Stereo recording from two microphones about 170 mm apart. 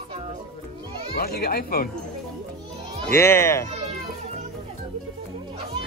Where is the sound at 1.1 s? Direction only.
65° left (ahead or behind).